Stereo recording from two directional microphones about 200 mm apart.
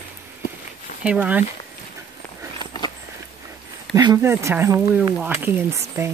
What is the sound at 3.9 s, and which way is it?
Speech, 20° right (ahead or behind).